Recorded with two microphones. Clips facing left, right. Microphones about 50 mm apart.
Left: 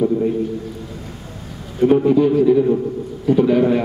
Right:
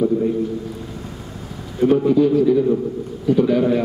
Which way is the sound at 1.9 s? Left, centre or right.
Centre.